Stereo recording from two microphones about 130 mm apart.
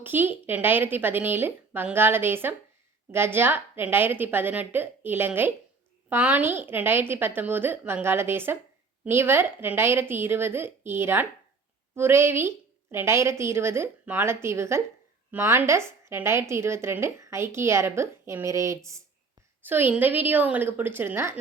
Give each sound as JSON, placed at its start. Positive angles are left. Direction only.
{"t": 0.0, "sound": "a woman's voice", "side_deg": -15}